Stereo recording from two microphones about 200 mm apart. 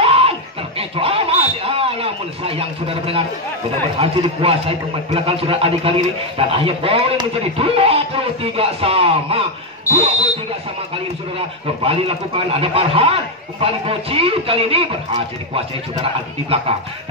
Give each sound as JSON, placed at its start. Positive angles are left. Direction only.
{"t": 0.0, "sound": "a sound", "side_deg": -30}
{"t": 4.0, "sound": "a man's voice", "side_deg": -30}
{"t": 9.9, "sound": "speech", "side_deg": 15}
{"t": 11.3, "sound": "a man's voice", "side_deg": -30}